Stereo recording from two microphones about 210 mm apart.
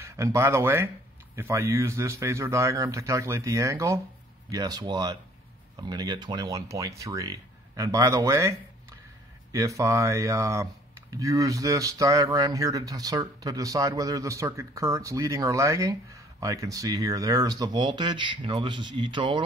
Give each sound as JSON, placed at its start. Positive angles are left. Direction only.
{"t": 0.0, "sound": "speech", "side_deg": -15}